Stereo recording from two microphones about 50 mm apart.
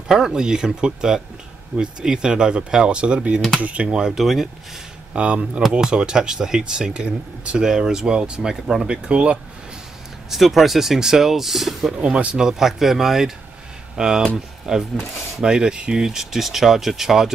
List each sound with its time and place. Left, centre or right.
0.1 s speech: centre
3.3 s speech: centre
3.6 s speech: right
4.2 s speech: centre
5.1 s speech: right
10.3 s speech: centre
11.9 s speech: right
12.4 s speech: centre